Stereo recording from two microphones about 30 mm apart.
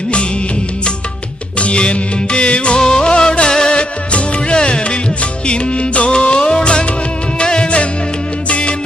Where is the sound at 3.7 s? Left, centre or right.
Left.